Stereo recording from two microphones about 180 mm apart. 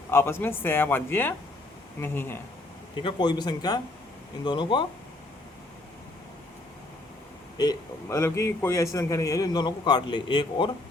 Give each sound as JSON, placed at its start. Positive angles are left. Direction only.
{"t": 0.1, "sound": "speech", "side_deg": 15}
{"t": 3.0, "sound": "a man's voice", "side_deg": 25}
{"t": 7.6, "sound": "a man's voice", "side_deg": 20}